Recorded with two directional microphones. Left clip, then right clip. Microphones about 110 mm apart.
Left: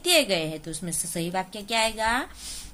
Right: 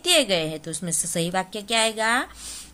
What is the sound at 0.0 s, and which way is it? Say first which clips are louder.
A woman's voice: right 2 dB; 25° right (ahead or behind).